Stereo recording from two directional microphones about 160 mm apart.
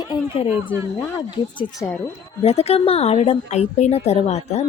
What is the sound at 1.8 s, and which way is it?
Speech, 15° left (ahead or behind).